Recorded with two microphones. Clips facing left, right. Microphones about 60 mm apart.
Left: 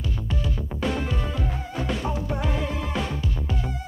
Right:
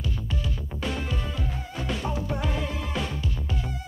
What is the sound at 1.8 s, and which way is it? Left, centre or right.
Music, left.